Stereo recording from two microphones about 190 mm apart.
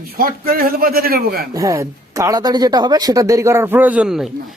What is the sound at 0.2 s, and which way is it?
A man's voice, 50° right (ahead or behind).